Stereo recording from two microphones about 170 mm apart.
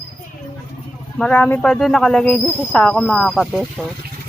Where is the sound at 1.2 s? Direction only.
10° left (ahead or behind).